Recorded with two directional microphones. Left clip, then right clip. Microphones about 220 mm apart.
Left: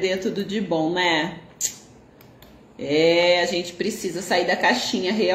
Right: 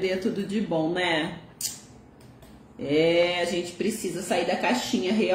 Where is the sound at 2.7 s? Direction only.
15° right (ahead or behind).